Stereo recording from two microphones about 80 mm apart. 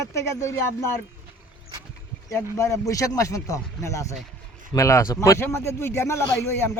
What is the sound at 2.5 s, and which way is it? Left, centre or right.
Speech, left.